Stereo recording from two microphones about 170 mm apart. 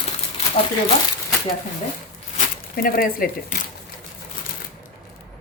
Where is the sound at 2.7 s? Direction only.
60° left (ahead or behind).